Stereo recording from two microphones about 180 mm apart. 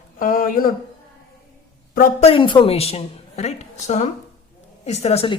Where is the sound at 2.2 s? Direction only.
30° left (ahead or behind).